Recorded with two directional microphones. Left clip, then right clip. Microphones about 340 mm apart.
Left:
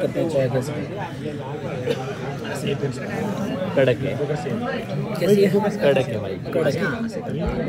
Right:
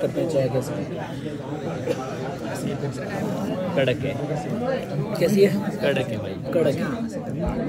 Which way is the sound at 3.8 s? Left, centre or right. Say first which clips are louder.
Left 4 dB; centre.